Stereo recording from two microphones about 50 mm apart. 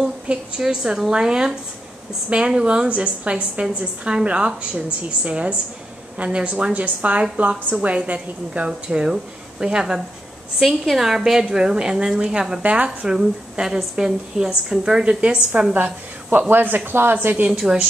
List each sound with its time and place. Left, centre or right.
0.0 s a woman's voice: centre
12.6 s a woman's voice: right
13.1 s a woman's voice: centre
15.7 s a woman's voice: right
17.6 s a woman's voice: centre